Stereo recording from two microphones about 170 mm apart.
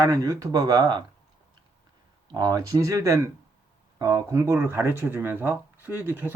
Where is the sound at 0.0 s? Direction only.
20° right (ahead or behind).